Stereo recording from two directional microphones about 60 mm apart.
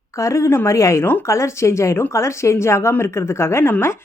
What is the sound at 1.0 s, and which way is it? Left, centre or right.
Speech, left.